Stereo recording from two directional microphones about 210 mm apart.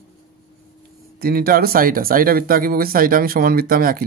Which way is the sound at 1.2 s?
45° right (ahead or behind).